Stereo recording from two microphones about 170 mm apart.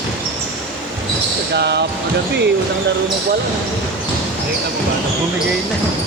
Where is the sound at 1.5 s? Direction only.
75° right (ahead or behind).